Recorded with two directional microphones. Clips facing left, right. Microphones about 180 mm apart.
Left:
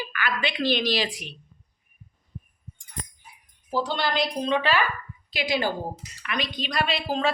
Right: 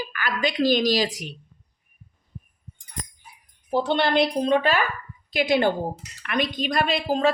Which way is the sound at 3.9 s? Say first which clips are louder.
Right 9 dB; 60° right (ahead or behind).